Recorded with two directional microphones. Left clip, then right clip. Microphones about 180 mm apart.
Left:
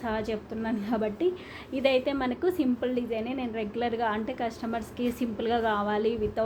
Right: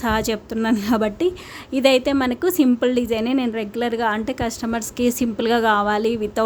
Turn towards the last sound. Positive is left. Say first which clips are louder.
# right 7 dB
turn(degrees=-40)  # may be behind; listen again after turning